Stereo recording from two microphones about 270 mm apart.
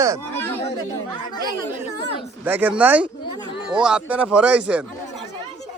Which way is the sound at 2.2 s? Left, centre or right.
Centre.